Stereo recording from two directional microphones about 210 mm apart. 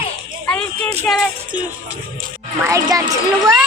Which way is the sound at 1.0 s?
Centre (ahead or behind).